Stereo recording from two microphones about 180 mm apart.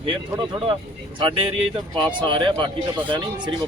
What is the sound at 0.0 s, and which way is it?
Speech, 25° right (ahead or behind).